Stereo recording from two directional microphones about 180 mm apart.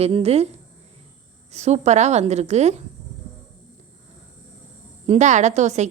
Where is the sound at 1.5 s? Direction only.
35° right (ahead or behind).